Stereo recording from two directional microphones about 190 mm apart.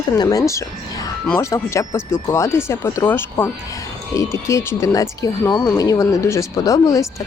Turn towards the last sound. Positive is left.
turn(degrees=15)  # may be behind; listen again after turning